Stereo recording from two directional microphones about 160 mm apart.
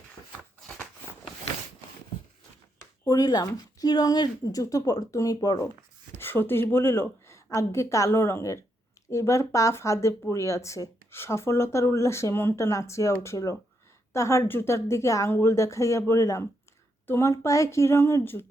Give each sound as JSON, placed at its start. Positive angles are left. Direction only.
{"t": 3.0, "sound": "a woman's voice", "side_deg": 25}